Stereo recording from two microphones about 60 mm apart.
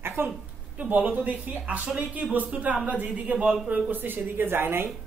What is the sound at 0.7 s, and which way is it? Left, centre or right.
A woman's voice, right.